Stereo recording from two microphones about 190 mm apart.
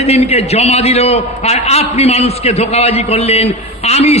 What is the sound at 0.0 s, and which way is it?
A man's voice, 35° left (ahead or behind).